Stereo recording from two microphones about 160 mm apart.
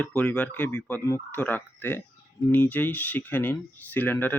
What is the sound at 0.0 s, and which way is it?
Speech, 15° left (ahead or behind).